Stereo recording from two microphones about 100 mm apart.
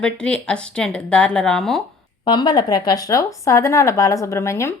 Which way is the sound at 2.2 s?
50° left (ahead or behind).